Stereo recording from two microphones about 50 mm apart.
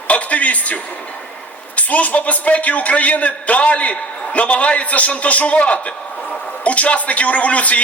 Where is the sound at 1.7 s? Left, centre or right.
Left.